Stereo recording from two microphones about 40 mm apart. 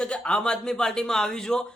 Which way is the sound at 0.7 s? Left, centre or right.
Centre.